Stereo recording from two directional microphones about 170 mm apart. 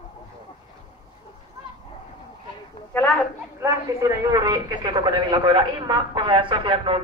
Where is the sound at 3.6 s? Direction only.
20° right (ahead or behind).